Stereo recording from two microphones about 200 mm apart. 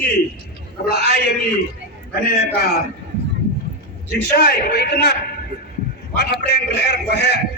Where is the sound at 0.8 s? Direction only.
55° left (ahead or behind).